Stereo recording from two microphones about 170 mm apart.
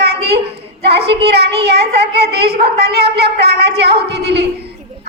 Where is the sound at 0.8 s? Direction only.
75° right (ahead or behind).